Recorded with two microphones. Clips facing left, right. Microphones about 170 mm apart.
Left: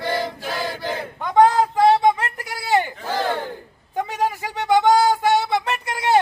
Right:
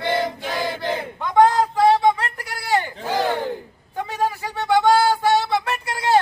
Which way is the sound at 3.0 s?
15° right (ahead or behind).